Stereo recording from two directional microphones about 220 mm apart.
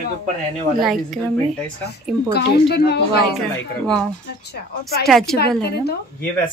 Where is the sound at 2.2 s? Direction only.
45° left (ahead or behind).